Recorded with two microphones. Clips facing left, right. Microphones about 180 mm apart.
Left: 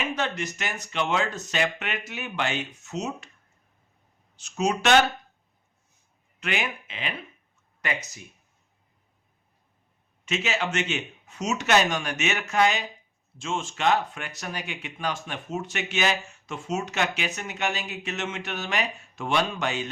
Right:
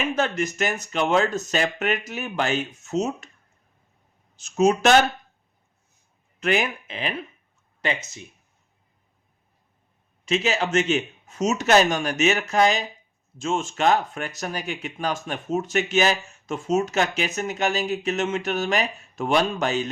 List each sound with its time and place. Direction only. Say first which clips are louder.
0.1 s speech: right 5 dB; 45° right (ahead or behind)
4.4 s speech: right 7 dB; 45° right (ahead or behind)
6.4 s speech: right 7 dB; 40° right (ahead or behind)
7.8 s speech: right 4 dB; 25° right (ahead or behind)
10.2 s speech: right 5 dB; 35° right (ahead or behind)